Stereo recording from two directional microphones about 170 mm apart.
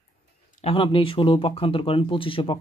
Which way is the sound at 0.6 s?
30° left (ahead or behind).